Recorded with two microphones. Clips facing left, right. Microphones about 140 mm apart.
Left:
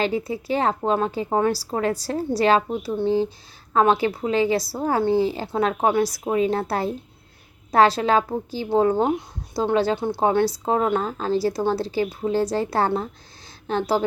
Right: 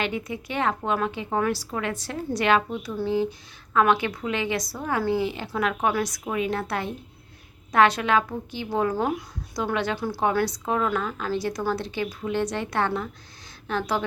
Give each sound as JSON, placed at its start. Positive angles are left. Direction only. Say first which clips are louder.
{"t": 0.0, "sound": "speech", "louder": "left 5 dB", "side_deg": 30}